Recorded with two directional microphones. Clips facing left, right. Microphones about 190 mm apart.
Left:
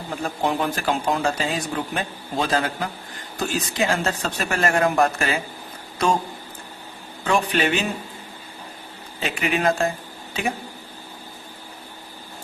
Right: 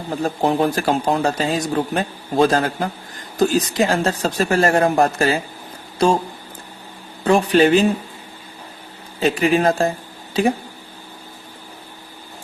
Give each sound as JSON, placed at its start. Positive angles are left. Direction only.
{"t": 0.2, "sound": "speech", "side_deg": -35}
{"t": 7.3, "sound": "speech", "side_deg": -35}
{"t": 9.2, "sound": "speech", "side_deg": -35}